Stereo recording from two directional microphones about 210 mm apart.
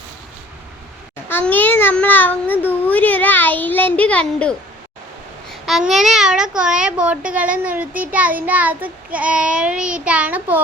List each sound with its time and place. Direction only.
1.3 s a child's voice: 10° left (ahead or behind); by 10.6 s 5° right (ahead or behind)